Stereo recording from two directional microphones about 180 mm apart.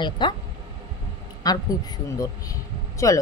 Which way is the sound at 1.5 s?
20° left (ahead or behind).